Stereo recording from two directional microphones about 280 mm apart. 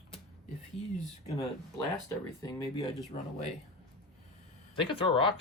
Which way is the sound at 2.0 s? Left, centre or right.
Centre.